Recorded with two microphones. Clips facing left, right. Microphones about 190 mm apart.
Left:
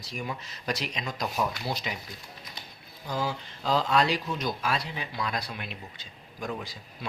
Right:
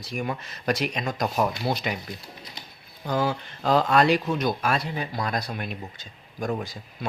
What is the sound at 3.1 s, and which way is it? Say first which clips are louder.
Speech: right 6 dB; 60° right (ahead or behind).